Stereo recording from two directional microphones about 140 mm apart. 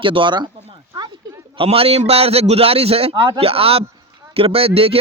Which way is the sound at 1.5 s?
40° right (ahead or behind).